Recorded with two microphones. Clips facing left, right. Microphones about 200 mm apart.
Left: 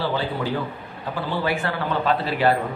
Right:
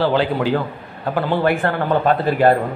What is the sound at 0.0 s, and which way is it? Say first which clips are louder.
Speech: right 7 dB; 75° right (ahead or behind).